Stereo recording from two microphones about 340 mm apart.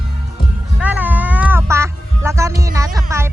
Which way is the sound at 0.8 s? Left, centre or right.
Centre.